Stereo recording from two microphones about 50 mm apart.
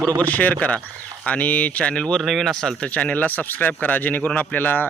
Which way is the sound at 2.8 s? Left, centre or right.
Left.